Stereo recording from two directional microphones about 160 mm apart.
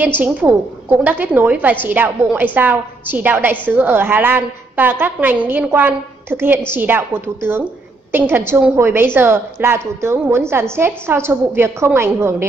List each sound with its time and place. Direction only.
0.0 s a woman's voice: 10° right (ahead or behind)